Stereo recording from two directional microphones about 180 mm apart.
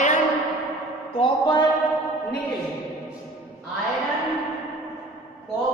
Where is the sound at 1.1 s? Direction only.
30° left (ahead or behind).